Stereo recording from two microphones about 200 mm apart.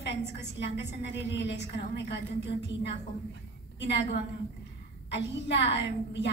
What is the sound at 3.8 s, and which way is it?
A woman's voice, 60° left (ahead or behind).